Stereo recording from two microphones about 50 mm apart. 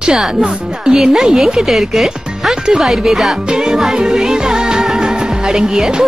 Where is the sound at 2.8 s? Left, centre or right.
Centre.